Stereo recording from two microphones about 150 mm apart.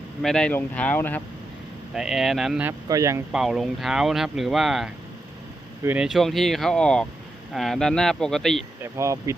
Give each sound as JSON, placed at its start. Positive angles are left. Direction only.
{"t": 0.2, "sound": "speech", "side_deg": 5}
{"t": 1.9, "sound": "speech", "side_deg": -5}
{"t": 2.8, "sound": "speech", "side_deg": -25}
{"t": 3.3, "sound": "speech", "side_deg": 0}
{"t": 8.8, "sound": "speech", "side_deg": -20}